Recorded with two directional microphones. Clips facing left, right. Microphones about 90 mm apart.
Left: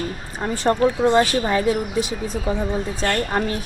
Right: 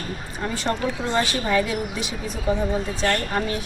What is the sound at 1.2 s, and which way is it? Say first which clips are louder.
A woman's voice: left 3 dB; 35° left (ahead or behind).